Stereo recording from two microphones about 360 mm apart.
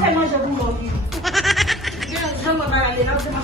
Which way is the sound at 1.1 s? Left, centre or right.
Centre.